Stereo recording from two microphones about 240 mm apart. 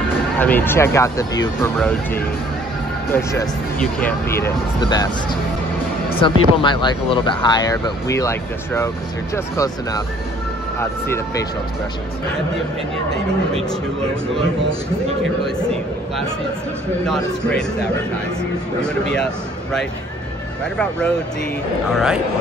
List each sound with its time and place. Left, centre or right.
0.4 s speech: centre
3.1 s speech: centre
6.1 s speech: centre
17.1 s a man's voice: centre
18.8 s a man's voice: centre
21.9 s a man's voice: centre